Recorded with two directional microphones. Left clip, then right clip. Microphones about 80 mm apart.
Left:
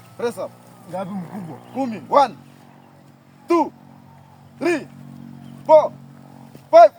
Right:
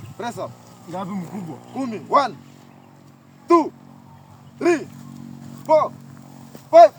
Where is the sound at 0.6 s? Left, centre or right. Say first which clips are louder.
Left 2 dB; centre.